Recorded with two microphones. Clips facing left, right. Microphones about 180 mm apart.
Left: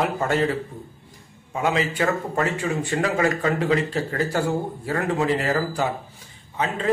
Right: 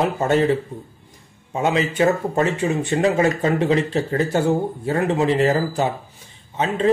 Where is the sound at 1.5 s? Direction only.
25° right (ahead or behind).